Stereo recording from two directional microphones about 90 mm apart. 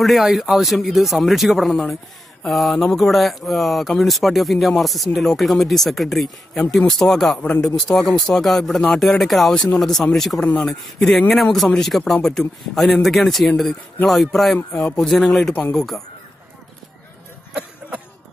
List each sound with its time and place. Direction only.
0.0 s speech: centre (ahead or behind)
14.7 s a man's voice: 15° left (ahead or behind)
15.0 s speech: 5° left (ahead or behind)
17.6 s a sound: 15° right (ahead or behind)